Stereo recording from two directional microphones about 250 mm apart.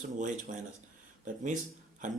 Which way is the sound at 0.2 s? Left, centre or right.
Right.